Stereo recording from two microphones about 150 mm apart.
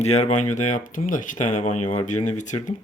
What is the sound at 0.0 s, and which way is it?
Speech, 45° left (ahead or behind).